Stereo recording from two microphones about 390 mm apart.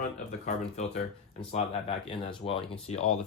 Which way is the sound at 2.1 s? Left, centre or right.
Centre.